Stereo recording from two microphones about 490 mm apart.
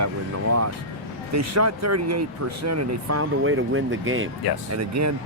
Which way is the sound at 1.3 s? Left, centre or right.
Right.